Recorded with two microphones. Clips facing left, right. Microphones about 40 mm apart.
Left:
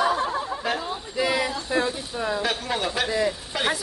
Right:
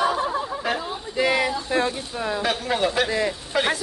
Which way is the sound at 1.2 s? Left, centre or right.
Right.